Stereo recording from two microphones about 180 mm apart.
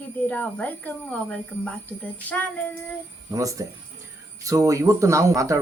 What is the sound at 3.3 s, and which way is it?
Speech, 20° right (ahead or behind).